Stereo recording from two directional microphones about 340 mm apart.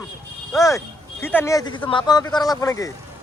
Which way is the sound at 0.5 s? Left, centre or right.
Centre.